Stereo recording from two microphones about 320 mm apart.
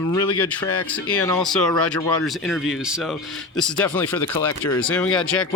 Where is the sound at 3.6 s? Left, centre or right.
Centre.